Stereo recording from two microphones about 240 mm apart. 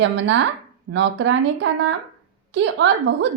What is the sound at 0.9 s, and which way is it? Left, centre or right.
Speech, right.